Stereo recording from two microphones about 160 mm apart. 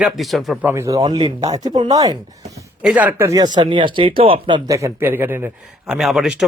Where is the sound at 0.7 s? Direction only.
20° right (ahead or behind).